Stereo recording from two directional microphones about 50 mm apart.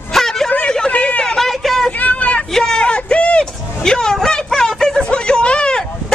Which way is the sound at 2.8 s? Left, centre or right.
Centre.